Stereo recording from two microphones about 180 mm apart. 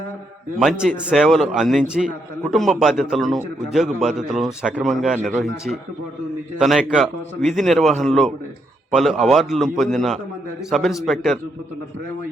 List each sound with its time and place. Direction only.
0.6 s a man's voice: centre (ahead or behind)